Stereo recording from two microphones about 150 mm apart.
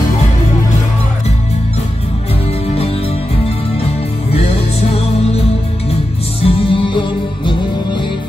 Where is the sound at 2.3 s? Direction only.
40° left (ahead or behind).